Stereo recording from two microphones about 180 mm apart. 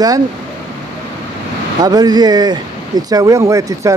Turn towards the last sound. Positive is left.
turn(degrees=-15)  # may be behind; listen again after turning